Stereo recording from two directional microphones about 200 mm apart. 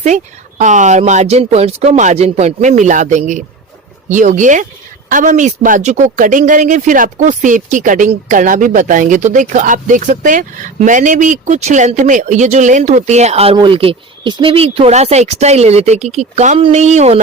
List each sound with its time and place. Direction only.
0.6 s speech: 40° right (ahead or behind)